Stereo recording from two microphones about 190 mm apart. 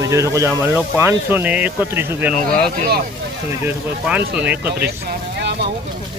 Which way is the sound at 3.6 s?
10° right (ahead or behind).